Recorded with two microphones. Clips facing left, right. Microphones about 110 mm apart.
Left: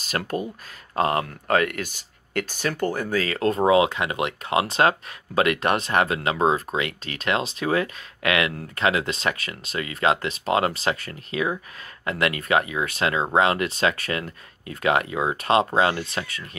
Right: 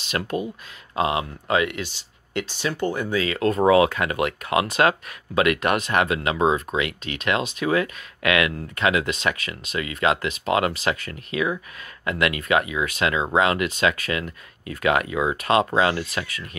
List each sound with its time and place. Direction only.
0.0 s speech: 40° left (ahead or behind)